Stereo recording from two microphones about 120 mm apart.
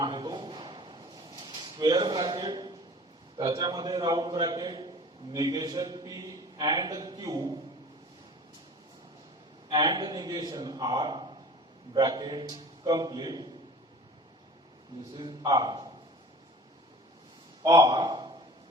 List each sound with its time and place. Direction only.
0.0 s a sound: 40° right (ahead or behind)
3.3 s a man's voice: 35° right (ahead or behind)
9.6 s a man's voice: 35° right (ahead or behind)
15.1 s a man's voice: 35° right (ahead or behind)
17.6 s a man's voice: 30° right (ahead or behind)